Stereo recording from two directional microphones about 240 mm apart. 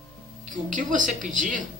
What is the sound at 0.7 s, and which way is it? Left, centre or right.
Speech, right.